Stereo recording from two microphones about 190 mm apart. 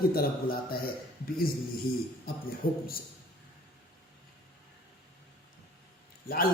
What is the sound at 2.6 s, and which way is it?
Speech, 50° left (ahead or behind).